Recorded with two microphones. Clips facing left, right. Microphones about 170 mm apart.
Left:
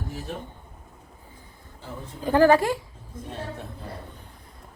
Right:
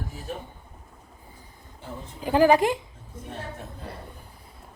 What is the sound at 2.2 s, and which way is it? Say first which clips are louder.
Speech: left 1 dB; 15° right (ahead or behind).